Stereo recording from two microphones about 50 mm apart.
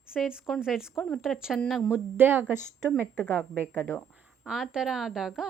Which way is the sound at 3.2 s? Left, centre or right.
Left.